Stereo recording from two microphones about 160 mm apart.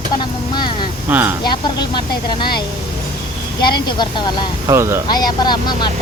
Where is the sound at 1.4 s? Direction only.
25° left (ahead or behind).